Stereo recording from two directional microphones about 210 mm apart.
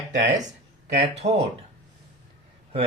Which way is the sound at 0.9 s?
30° right (ahead or behind).